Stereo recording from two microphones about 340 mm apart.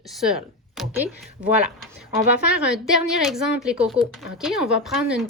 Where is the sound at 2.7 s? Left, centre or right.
Centre.